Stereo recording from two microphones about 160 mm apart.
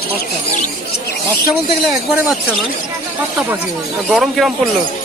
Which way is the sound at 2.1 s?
5° right (ahead or behind).